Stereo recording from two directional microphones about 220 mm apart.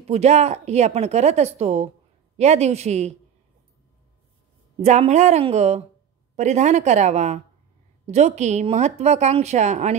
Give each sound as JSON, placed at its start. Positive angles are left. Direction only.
{"t": 0.1, "sound": "speech", "side_deg": -30}
{"t": 4.8, "sound": "speech", "side_deg": -30}